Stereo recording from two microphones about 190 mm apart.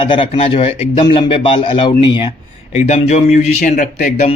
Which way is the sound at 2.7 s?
35° left (ahead or behind).